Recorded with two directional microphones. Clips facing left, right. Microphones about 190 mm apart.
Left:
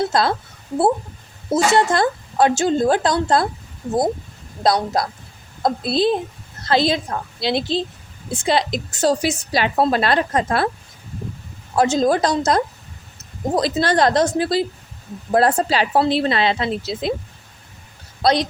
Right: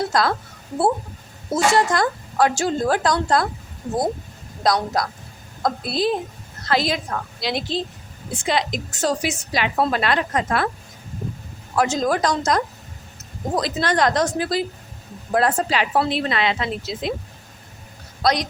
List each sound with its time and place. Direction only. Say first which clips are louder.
0.0 s speech: left 2 dB; 25° left (ahead or behind)
1.5 s speech: left 2 dB; 25° left (ahead or behind)
4.6 s a woman's voice: left 2 dB; 30° left (ahead or behind)
11.7 s a woman's voice: left 4 dB; 25° left (ahead or behind)
18.2 s a man's voice: left 3 dB; 30° left (ahead or behind)